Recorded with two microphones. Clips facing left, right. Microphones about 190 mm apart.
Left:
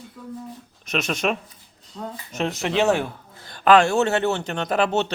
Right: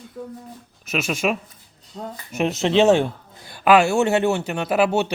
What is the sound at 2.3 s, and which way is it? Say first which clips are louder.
Speech: right 5 dB; 20° right (ahead or behind).